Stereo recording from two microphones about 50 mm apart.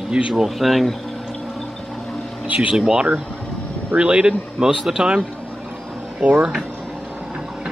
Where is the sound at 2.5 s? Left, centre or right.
Centre.